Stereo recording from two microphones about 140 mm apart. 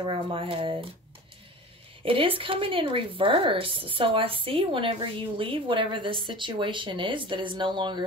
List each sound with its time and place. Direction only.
0.0 s speech: 40° right (ahead or behind)
2.0 s speech: 40° right (ahead or behind)